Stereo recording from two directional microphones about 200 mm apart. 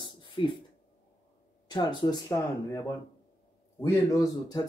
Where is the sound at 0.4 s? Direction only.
25° left (ahead or behind).